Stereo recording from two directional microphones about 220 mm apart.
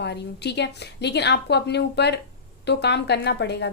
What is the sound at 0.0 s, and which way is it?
A woman's voice, 50° left (ahead or behind).